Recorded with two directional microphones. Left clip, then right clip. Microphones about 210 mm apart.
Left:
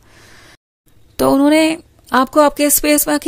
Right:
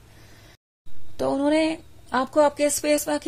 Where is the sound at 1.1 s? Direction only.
35° left (ahead or behind).